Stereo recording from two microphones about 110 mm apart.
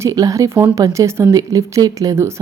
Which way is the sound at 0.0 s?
30° right (ahead or behind).